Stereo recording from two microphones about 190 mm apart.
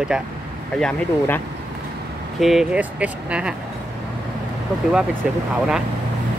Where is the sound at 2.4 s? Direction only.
5° right (ahead or behind).